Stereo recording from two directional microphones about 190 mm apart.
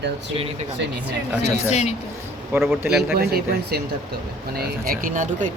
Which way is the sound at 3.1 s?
55° right (ahead or behind).